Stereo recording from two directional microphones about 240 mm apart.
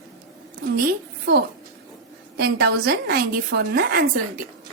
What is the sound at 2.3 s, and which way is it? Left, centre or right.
A woman's voice, right.